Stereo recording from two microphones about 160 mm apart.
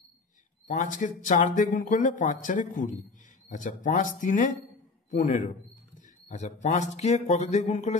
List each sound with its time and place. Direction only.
0.7 s speech: 50° left (ahead or behind)